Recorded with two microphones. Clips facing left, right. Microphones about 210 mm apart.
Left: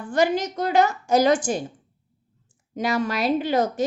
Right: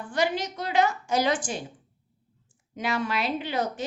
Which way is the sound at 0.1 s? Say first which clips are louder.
Left 6 dB; 45° left (ahead or behind).